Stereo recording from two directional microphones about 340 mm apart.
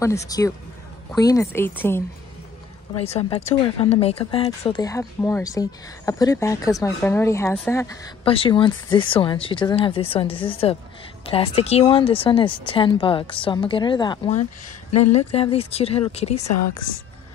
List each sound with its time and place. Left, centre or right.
0.2 s speech: centre
3.0 s speech: centre
14.9 s speech: left
15.1 s speech: centre
16.3 s a woman's voice: left